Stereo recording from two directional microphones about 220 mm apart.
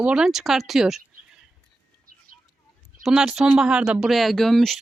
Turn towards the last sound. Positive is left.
turn(degrees=0)  # may be behind; listen again after turning